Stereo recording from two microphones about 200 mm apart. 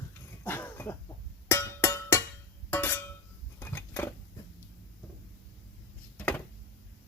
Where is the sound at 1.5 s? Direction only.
15° left (ahead or behind).